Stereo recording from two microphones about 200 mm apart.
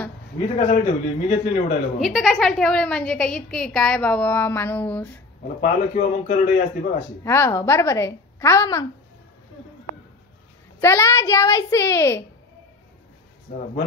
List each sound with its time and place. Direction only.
0.6 s a man's voice: 30° left (ahead or behind)
2.0 s a woman's voice: centre (ahead or behind)
5.6 s a man's voice: 40° left (ahead or behind)
7.2 s a woman's voice: 10° left (ahead or behind)
10.8 s a woman's voice: 15° left (ahead or behind)